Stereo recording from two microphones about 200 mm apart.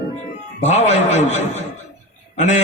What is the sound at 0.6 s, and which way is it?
A man's voice, 35° left (ahead or behind).